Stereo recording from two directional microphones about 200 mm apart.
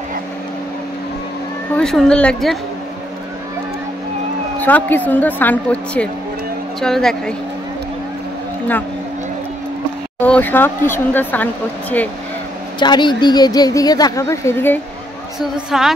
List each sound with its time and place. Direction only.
1.8 s a woman's voice: 5° left (ahead or behind)
4.6 s a woman's voice: 10° left (ahead or behind)
10.2 s a woman's voice: 10° left (ahead or behind)
12.7 s a woman's voice: 20° left (ahead or behind)
15.5 s a woman's voice: centre (ahead or behind)